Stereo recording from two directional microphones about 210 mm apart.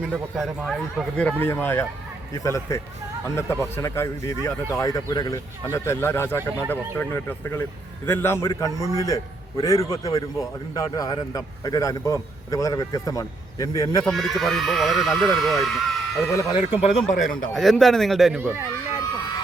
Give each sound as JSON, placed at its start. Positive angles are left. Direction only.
{"t": 0.0, "sound": "a man's voice", "side_deg": -5}
{"t": 14.0, "sound": "speech", "side_deg": 0}
{"t": 16.3, "sound": "a man's voice", "side_deg": 15}
{"t": 17.1, "sound": "a man's voice", "side_deg": 40}
{"t": 17.5, "sound": "speech", "side_deg": 0}